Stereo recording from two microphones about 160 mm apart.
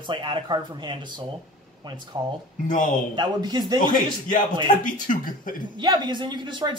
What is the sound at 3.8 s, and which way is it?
Speech, 60° left (ahead or behind).